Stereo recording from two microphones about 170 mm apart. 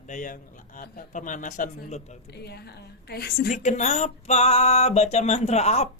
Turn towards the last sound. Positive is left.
turn(degrees=40)  # may be behind; listen again after turning